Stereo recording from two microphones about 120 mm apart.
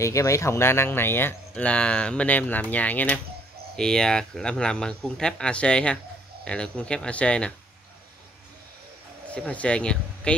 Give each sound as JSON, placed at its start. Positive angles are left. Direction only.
{"t": 0.0, "sound": "speech", "side_deg": 25}
{"t": 9.3, "sound": "speech", "side_deg": 10}